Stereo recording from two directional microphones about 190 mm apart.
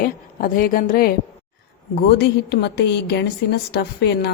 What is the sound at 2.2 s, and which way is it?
Speech, 60° left (ahead or behind).